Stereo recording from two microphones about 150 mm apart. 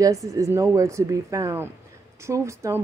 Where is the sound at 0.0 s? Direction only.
20° right (ahead or behind).